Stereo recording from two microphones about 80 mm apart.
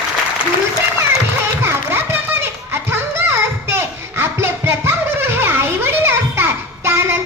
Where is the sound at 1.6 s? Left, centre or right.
Right.